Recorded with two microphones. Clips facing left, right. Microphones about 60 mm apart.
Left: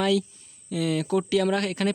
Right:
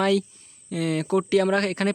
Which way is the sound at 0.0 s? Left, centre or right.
Right.